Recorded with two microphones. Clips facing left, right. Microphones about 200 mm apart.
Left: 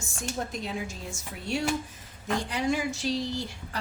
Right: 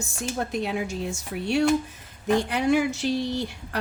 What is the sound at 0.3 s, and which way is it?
A woman's voice, 65° right (ahead or behind).